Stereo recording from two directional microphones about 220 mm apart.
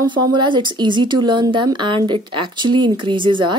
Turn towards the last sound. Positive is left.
turn(degrees=-20)  # may be behind; listen again after turning